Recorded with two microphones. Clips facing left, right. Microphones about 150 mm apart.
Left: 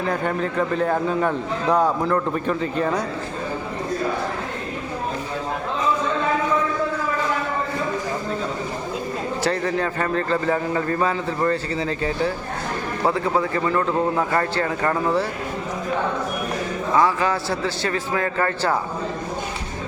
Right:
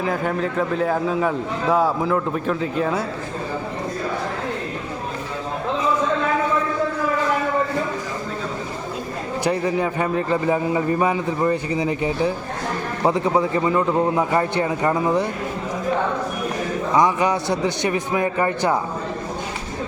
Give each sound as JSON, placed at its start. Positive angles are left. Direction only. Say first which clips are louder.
{"t": 0.0, "sound": "a man's voice", "louder": "right 1 dB", "side_deg": 0}
{"t": 9.4, "sound": "a man's voice", "louder": "right 3 dB", "side_deg": -10}
{"t": 16.9, "sound": "a man's voice", "louder": "right 1 dB", "side_deg": -20}